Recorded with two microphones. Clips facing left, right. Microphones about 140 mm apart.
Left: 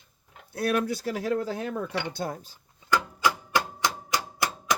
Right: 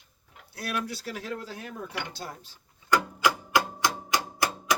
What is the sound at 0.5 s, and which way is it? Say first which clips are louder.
Speech: left 7 dB; 55° left (ahead or behind).